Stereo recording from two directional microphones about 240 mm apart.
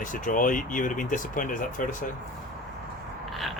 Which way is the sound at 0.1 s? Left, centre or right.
Left.